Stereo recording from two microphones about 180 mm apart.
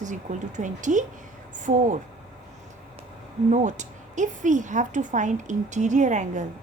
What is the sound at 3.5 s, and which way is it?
Speech, 40° right (ahead or behind).